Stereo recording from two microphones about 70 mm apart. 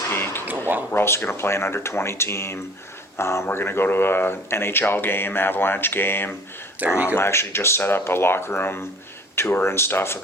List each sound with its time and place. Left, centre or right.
0.1 s a sound: left
0.9 s speech: left
6.8 s speech: right
7.2 s speech: left